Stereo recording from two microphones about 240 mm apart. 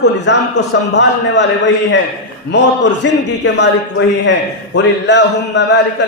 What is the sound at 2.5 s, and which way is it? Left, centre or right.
A man's voice, left.